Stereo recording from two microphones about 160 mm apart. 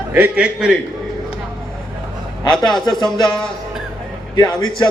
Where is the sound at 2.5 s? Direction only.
Centre (ahead or behind).